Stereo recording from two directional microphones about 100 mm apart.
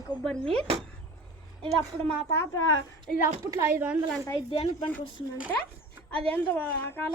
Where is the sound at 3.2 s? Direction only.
30° right (ahead or behind).